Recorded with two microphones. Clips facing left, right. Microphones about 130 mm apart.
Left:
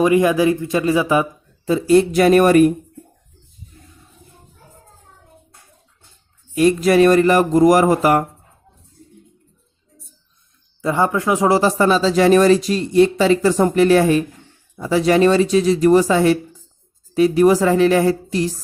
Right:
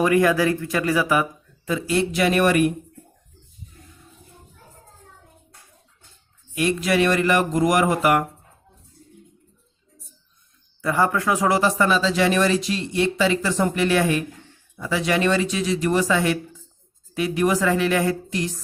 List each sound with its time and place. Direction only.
0.0 s a man's voice: 20° left (ahead or behind)
1.7 s speech: 40° left (ahead or behind)
6.5 s speech: 40° left (ahead or behind)
10.8 s speech: 20° left (ahead or behind)